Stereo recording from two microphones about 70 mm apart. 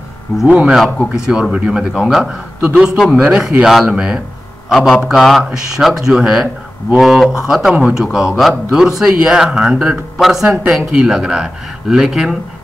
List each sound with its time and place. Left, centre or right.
0.5 s a man's voice: centre
0.8 s speech: centre
1.2 s a man's voice: centre